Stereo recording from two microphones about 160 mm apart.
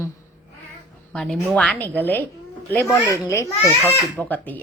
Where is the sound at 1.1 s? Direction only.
5° left (ahead or behind).